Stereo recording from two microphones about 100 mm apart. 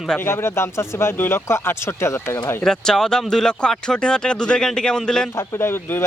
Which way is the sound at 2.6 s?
5° left (ahead or behind).